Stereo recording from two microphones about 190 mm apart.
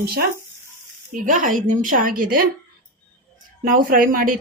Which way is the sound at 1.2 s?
45° right (ahead or behind).